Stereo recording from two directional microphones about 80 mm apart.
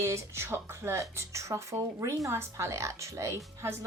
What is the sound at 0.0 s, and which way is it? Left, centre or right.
Speech, right.